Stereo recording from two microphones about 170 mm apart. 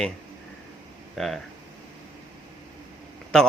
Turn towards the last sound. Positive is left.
turn(degrees=5)  # may be behind; listen again after turning